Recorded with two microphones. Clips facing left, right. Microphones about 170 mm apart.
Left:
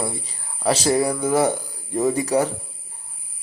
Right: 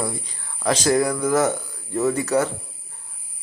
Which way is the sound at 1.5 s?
15° left (ahead or behind).